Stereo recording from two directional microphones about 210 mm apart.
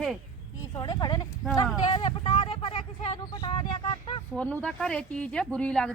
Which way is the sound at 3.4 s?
25° left (ahead or behind).